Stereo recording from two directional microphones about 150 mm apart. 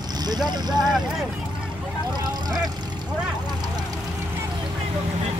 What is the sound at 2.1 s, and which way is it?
Vehicle, 25° right (ahead or behind).